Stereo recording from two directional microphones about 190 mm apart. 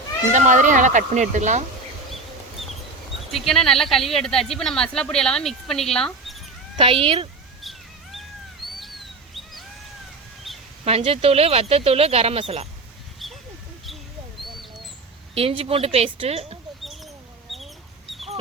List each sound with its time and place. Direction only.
0.3 s speech: 40° right (ahead or behind)
3.3 s speech: centre (ahead or behind)
6.7 s speech: 30° right (ahead or behind)
7.6 s cat: centre (ahead or behind)
8.8 s bird: centre (ahead or behind)
10.8 s speech: 30° right (ahead or behind)
13.2 s a sound: centre (ahead or behind)
15.4 s speech: 30° right (ahead or behind)
16.8 s mouse: centre (ahead or behind)